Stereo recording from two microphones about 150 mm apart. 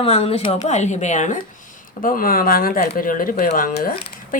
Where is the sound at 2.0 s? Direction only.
70° left (ahead or behind).